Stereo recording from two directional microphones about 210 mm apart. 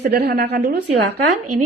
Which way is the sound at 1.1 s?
90° right.